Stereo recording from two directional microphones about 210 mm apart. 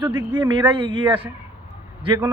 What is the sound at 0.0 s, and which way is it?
Speech, 10° right (ahead or behind).